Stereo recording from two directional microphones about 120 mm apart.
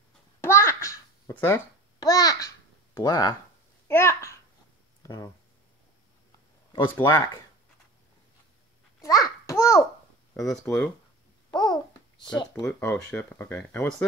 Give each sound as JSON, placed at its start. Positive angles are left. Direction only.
{"t": 0.4, "sound": "a sound", "side_deg": 20}
{"t": 1.3, "sound": "speech", "side_deg": 20}
{"t": 2.0, "sound": "babbling", "side_deg": 30}
{"t": 3.8, "sound": "babbling", "side_deg": 20}
{"t": 5.0, "sound": "speech", "side_deg": 25}
{"t": 7.0, "sound": "speech", "side_deg": 40}
{"t": 9.0, "sound": "babbling", "side_deg": 25}
{"t": 10.5, "sound": "speech", "side_deg": 10}
{"t": 11.5, "sound": "babbling", "side_deg": 35}
{"t": 12.6, "sound": "speech", "side_deg": 10}